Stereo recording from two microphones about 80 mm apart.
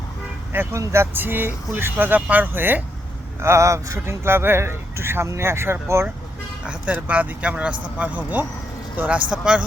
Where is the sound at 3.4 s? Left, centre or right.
Right.